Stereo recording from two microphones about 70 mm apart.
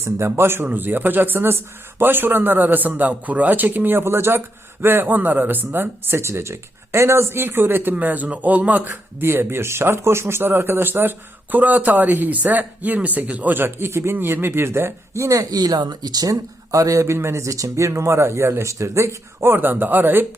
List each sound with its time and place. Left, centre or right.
0.0 s a man's voice: right
15.4 s speech: right